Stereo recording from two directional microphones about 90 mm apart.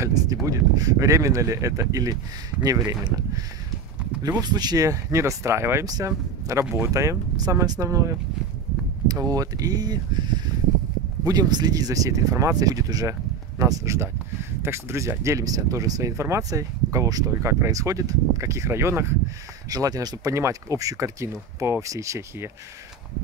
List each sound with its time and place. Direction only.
0.0 s speech: 40° right (ahead or behind)
19.7 s speech: 45° right (ahead or behind)